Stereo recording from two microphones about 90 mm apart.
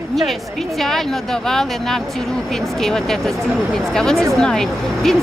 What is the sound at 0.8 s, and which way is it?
Speech, 5° left (ahead or behind).